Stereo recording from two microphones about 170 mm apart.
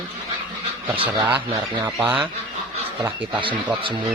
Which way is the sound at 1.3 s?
10° right (ahead or behind).